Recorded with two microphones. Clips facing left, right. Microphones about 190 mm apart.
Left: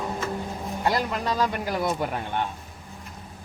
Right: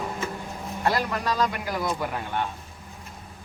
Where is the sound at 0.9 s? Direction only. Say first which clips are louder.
Even; 20° left (ahead or behind).